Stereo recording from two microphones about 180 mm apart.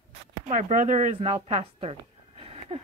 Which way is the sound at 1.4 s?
35° right (ahead or behind).